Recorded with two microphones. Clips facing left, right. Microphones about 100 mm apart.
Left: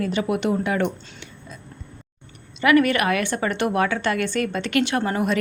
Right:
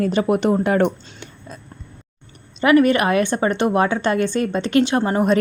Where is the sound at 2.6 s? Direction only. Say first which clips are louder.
Right 3 dB; 30° right (ahead or behind).